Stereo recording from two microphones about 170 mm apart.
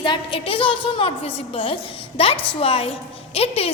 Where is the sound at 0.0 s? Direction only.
30° left (ahead or behind).